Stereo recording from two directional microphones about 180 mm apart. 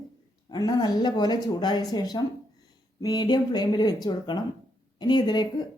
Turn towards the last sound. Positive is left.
turn(degrees=25)  # may be behind; listen again after turning